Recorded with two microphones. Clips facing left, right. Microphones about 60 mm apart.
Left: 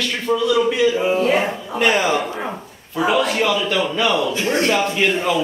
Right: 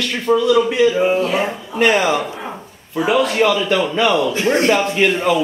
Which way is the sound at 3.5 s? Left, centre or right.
Centre.